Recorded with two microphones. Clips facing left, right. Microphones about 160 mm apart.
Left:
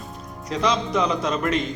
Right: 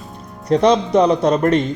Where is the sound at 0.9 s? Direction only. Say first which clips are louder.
Right 9 dB; 40° right (ahead or behind).